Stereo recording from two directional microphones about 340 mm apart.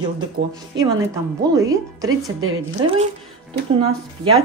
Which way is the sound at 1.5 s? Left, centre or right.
Centre.